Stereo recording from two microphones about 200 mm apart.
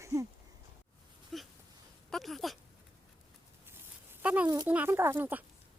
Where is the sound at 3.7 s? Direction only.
10° right (ahead or behind).